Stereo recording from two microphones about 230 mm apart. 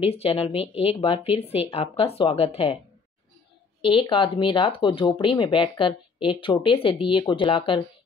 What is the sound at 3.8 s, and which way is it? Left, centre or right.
Speech, left.